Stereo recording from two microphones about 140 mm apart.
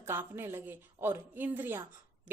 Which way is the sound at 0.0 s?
15° right (ahead or behind).